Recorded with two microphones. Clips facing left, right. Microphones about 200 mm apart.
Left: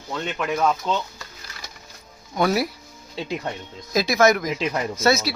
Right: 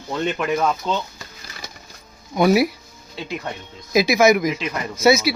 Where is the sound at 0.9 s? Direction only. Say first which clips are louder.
Right 1 dB; 5° left (ahead or behind).